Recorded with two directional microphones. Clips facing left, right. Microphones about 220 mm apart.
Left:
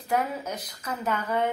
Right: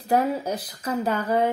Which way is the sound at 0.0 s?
35° right (ahead or behind).